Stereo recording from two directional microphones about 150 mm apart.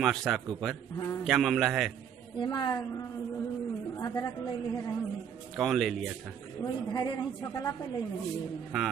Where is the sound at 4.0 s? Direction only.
25° left (ahead or behind).